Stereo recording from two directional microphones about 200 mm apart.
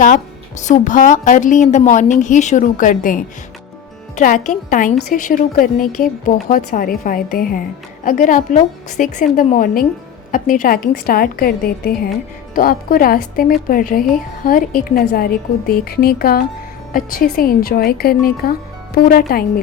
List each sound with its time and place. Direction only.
0.6 s a woman's voice: 40° left (ahead or behind)